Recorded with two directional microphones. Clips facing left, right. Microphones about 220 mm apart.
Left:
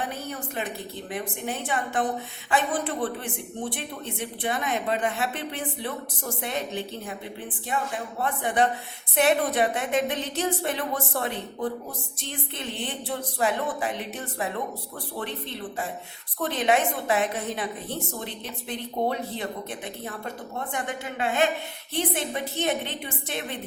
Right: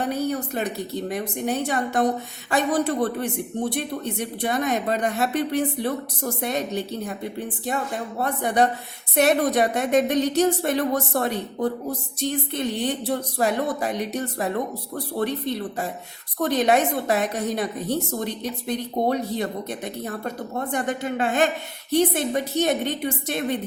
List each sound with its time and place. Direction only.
0.0 s a woman's voice: 40° right (ahead or behind)
8.2 s a woman's voice: 40° right (ahead or behind)
16.4 s a woman's voice: 40° right (ahead or behind)
20.7 s a woman's voice: 40° right (ahead or behind)